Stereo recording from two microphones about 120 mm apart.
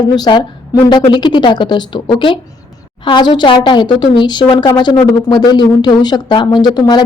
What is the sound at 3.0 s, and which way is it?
A woman's voice, 40° left (ahead or behind).